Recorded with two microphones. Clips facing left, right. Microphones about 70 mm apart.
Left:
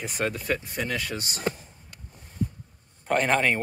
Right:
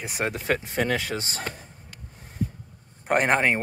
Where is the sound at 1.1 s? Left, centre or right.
Right.